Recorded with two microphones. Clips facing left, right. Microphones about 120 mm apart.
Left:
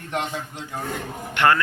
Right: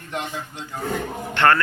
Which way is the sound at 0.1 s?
55° left (ahead or behind).